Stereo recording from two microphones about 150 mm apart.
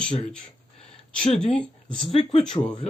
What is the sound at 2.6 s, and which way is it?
Speech, 20° left (ahead or behind).